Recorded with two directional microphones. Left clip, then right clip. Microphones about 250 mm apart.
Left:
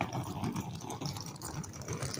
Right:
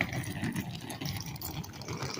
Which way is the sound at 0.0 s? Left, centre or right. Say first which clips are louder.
Right 3 dB; right.